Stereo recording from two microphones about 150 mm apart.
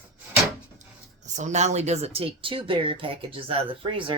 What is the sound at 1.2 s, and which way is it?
Speech, 50° right (ahead or behind).